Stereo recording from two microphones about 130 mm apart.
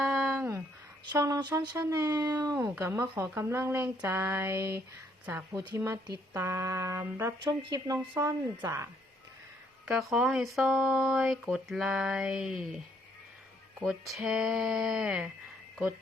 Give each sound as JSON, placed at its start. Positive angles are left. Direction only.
{"t": 0.0, "sound": "a sound", "side_deg": -5}
{"t": 1.2, "sound": "speech", "side_deg": -25}
{"t": 2.6, "sound": "speech", "side_deg": -15}
{"t": 9.8, "sound": "speech", "side_deg": -5}
{"t": 14.0, "sound": "speech", "side_deg": -5}